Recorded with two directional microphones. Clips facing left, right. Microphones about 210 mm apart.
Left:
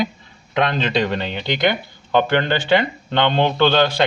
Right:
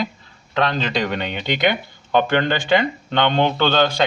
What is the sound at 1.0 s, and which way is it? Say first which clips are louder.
A man's voice: left 2 dB; centre (ahead or behind).